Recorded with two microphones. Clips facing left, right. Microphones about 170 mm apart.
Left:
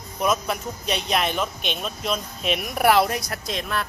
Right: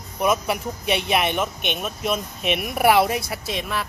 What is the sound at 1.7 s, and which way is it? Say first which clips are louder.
Speech: right 3 dB; 5° right (ahead or behind).